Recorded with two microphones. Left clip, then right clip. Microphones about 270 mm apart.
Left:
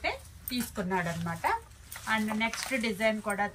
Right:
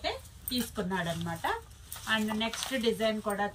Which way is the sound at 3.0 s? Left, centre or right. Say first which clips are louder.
Left 1 dB; left.